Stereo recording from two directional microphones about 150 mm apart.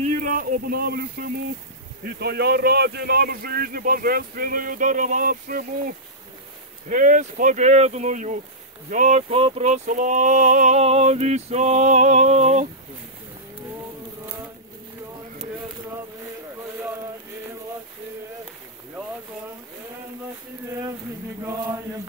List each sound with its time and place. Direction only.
0.0 s a man's voice: 60° right (ahead or behind)
9.3 s speech: 45° right (ahead or behind)
21.5 s chant: 20° right (ahead or behind)